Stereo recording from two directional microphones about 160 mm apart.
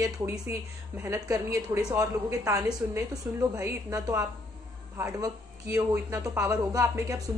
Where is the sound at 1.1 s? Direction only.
20° right (ahead or behind).